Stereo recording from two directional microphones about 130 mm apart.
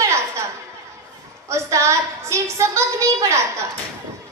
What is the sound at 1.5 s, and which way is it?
A woman's voice, 20° right (ahead or behind).